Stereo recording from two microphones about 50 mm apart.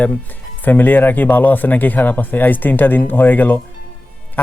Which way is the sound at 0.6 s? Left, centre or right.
Left.